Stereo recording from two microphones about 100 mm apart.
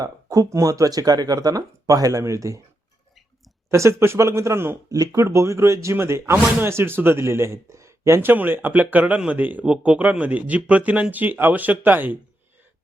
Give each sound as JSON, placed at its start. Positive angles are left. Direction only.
{"t": 0.0, "sound": "speech", "side_deg": -35}
{"t": 3.7, "sound": "speech", "side_deg": -30}